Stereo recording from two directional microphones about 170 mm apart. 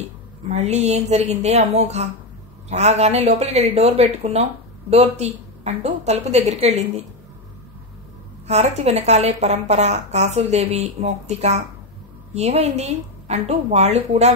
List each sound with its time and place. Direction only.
0.5 s speech: 40° right (ahead or behind)
8.5 s speech: 40° right (ahead or behind)